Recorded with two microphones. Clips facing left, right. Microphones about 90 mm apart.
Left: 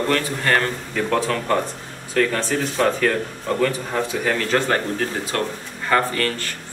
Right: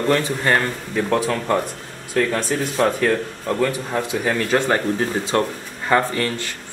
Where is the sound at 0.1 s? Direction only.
20° right (ahead or behind).